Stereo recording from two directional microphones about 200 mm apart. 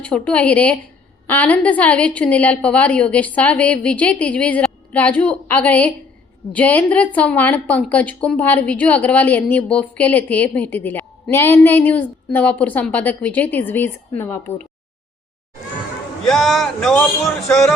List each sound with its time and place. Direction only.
0.0 s a woman's voice: 5° left (ahead or behind)
16.2 s speech: centre (ahead or behind)